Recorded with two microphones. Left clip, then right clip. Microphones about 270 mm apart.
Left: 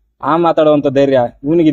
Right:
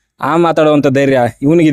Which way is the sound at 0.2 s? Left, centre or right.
Right.